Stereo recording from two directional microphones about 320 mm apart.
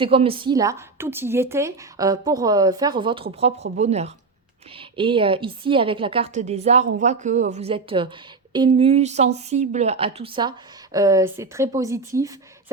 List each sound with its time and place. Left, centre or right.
0.0 s a woman's voice: centre